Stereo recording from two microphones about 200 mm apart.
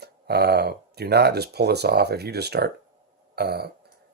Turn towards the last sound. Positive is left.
turn(degrees=-55)  # may be behind; listen again after turning